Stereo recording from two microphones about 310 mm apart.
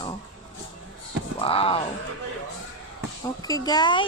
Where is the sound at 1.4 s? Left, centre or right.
Centre.